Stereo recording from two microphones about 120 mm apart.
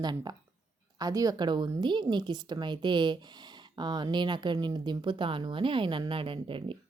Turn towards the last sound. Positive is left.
turn(degrees=-45)  # may be behind; listen again after turning